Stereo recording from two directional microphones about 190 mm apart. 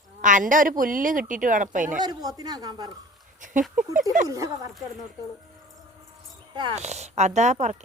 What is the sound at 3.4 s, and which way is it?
Dog, 45° right (ahead or behind).